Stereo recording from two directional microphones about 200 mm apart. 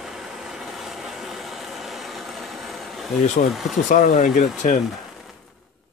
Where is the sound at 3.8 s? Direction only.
40° left (ahead or behind).